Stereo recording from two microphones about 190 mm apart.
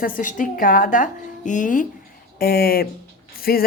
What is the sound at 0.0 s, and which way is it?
Speech, 45° left (ahead or behind).